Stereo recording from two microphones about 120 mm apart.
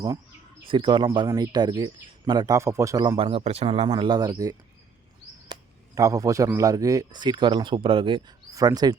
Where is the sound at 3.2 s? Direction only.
50° right (ahead or behind).